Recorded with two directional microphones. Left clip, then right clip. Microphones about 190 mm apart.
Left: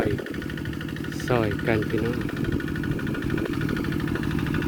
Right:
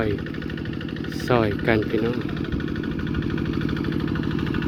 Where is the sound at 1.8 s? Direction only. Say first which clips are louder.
Right 3 dB; 25° left (ahead or behind).